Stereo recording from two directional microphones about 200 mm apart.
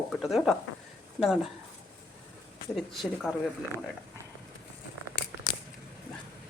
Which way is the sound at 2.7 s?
Centre (ahead or behind).